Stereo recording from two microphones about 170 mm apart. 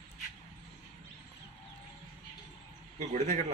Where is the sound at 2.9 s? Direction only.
40° right (ahead or behind).